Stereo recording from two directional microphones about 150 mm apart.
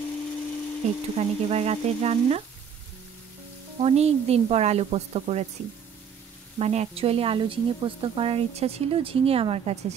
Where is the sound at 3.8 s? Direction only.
45° right (ahead or behind).